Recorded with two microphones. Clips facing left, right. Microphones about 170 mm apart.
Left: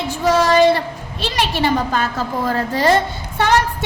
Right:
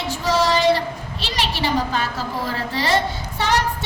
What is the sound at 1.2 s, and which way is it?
A woman's voice, 55° left (ahead or behind).